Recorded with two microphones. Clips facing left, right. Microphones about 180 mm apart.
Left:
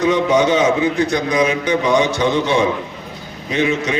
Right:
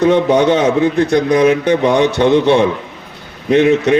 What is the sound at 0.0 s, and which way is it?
A man's voice, 60° right (ahead or behind).